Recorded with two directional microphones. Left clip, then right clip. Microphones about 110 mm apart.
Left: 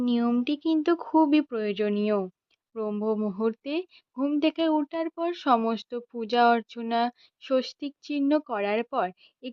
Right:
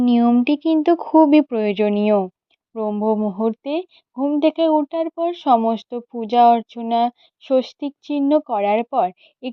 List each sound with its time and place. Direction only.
0.0 s a sound: 40° right (ahead or behind)
0.4 s speech: 40° right (ahead or behind)
2.7 s speech: 20° right (ahead or behind)